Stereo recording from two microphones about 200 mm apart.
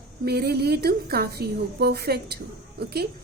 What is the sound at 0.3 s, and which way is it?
A woman's voice, 50° right (ahead or behind).